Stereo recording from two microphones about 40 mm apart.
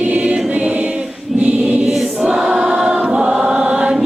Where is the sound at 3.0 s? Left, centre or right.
Right.